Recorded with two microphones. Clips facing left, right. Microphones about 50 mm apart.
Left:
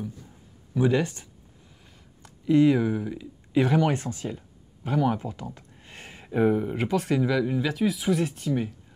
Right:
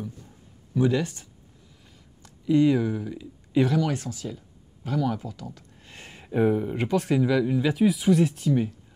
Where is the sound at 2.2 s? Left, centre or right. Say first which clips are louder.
Left 1 dB; centre.